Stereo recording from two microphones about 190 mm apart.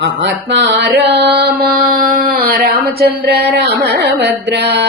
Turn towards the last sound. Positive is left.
turn(degrees=-60)  # may be behind; listen again after turning